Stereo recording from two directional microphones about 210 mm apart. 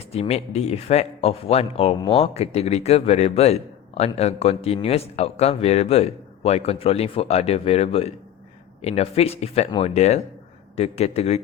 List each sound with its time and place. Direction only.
0.0 s speech: 30° left (ahead or behind)